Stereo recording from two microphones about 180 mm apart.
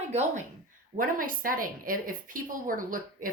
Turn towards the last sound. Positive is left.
turn(degrees=-50)  # may be behind; listen again after turning